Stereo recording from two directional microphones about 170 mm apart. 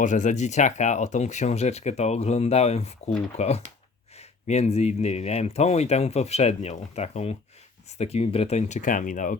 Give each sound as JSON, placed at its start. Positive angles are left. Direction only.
{"t": 0.0, "sound": "speech", "side_deg": 45}